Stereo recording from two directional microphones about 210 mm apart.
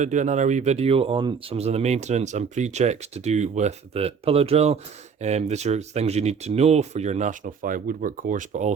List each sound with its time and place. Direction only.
0.0 s speech: 35° right (ahead or behind)